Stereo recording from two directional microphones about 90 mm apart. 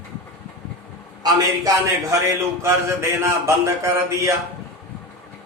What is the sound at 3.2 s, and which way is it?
Speech, 30° right (ahead or behind).